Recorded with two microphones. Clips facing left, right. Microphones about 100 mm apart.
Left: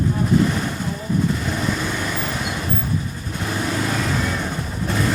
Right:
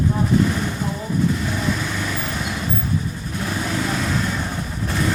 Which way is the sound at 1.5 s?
Centre (ahead or behind).